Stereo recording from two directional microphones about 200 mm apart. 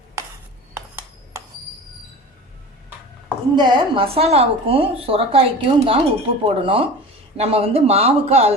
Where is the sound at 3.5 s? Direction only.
20° right (ahead or behind).